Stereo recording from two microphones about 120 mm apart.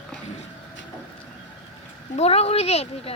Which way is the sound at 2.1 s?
60° left (ahead or behind).